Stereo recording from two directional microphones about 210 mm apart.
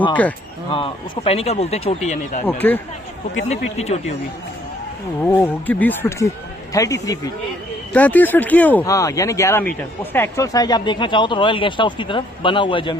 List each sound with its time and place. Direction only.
0.1 s speech: 5° left (ahead or behind)
0.7 s speech: 25° left (ahead or behind)
2.6 s speech: 10° left (ahead or behind)
3.3 s speech: 30° left (ahead or behind)
5.2 s speech: 10° left (ahead or behind)